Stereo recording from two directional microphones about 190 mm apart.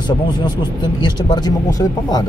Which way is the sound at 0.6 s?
20° left (ahead or behind).